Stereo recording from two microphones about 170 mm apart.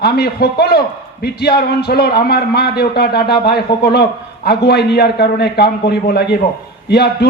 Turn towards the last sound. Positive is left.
turn(degrees=75)  # may be behind; listen again after turning